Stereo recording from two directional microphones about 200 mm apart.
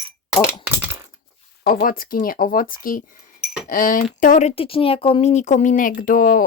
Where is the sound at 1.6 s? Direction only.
45° left (ahead or behind).